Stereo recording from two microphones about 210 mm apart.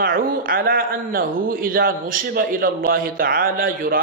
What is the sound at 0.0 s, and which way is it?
A man's voice, 40° right (ahead or behind).